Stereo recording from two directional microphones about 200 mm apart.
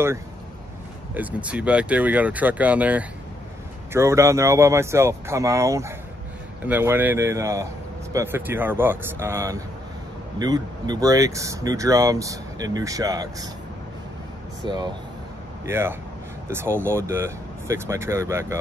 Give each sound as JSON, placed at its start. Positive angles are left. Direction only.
{"t": 1.1, "sound": "speech", "side_deg": -5}
{"t": 14.6, "sound": "speech", "side_deg": -25}
{"t": 15.6, "sound": "speech", "side_deg": -10}